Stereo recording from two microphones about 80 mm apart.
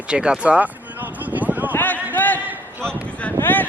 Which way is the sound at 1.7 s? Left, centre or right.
Left.